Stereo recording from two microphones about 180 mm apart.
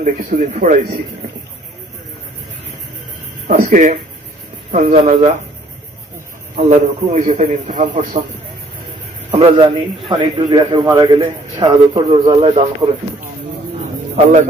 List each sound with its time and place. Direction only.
0.0 s a man's voice: 45° right (ahead or behind)
3.4 s a man's voice: 45° right (ahead or behind)
6.5 s a man's voice: 40° right (ahead or behind)
14.1 s a man's voice: 40° right (ahead or behind)